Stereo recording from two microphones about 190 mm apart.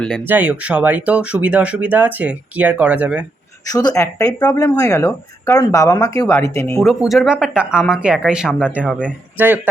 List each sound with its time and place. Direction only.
0.3 s speech: 10° right (ahead or behind)
3.7 s a woman's voice: 20° left (ahead or behind)
6.8 s speech: centre (ahead or behind)